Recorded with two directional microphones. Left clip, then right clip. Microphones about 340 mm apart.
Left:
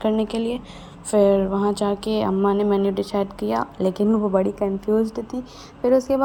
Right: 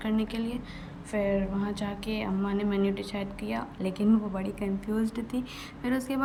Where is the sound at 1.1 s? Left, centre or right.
Left.